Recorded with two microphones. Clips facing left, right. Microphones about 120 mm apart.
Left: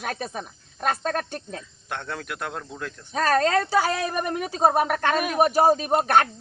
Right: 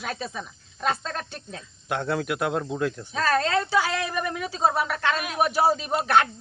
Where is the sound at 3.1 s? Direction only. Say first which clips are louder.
Left 4 dB; 45° left (ahead or behind).